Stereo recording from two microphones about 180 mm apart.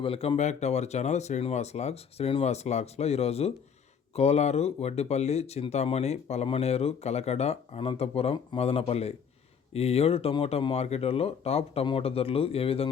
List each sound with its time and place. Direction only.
0.0 s speech: 30° left (ahead or behind)